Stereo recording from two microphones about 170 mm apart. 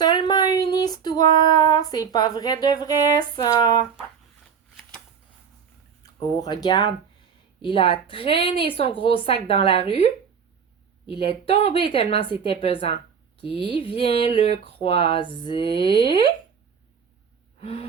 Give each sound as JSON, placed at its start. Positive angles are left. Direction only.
{"t": 0.0, "sound": "female singing", "side_deg": 25}
{"t": 6.0, "sound": "speech", "side_deg": 25}
{"t": 11.2, "sound": "speech", "side_deg": 35}
{"t": 17.6, "sound": "gasp", "side_deg": 35}